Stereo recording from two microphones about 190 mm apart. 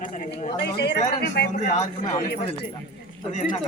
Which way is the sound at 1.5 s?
40° left (ahead or behind).